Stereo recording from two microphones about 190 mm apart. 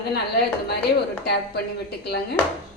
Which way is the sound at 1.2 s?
60° left (ahead or behind).